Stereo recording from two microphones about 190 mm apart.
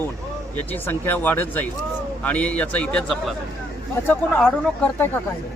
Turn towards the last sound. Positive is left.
turn(degrees=5)  # may be behind; listen again after turning